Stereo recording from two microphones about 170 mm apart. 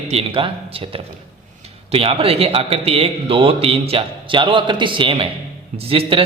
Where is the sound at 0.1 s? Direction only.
35° right (ahead or behind).